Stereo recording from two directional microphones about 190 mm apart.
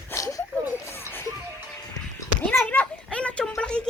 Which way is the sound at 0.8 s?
10° left (ahead or behind).